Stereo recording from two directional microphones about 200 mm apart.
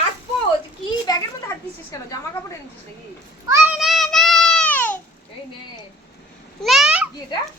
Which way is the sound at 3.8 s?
Centre (ahead or behind).